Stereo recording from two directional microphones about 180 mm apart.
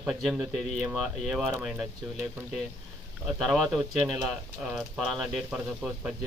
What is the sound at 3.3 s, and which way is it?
Speech, centre (ahead or behind).